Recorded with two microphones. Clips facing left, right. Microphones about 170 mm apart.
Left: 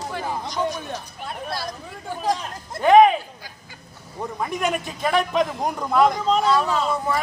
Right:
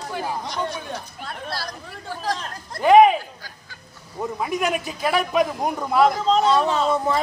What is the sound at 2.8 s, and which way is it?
Speech, centre (ahead or behind).